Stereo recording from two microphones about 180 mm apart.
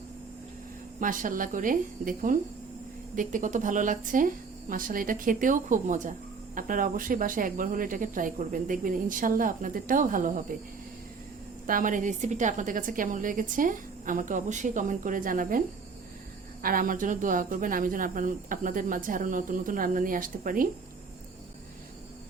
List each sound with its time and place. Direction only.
0.9 s speech: 45° right (ahead or behind)
11.6 s speech: 50° right (ahead or behind)
16.6 s speech: 50° right (ahead or behind)